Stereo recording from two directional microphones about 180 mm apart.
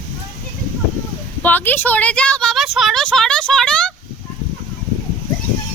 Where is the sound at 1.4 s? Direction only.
10° left (ahead or behind).